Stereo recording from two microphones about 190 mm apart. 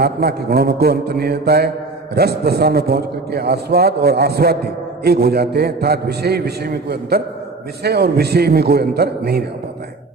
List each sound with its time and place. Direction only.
0.0 s a man's voice: 55° right (ahead or behind)